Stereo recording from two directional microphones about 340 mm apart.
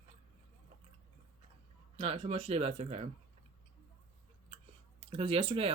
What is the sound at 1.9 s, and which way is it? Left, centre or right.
Speech, centre.